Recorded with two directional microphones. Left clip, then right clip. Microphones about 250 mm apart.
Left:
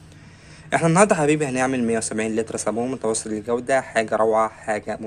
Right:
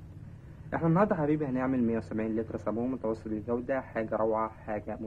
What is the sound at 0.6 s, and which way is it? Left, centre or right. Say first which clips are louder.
Speech: left 11 dB; left.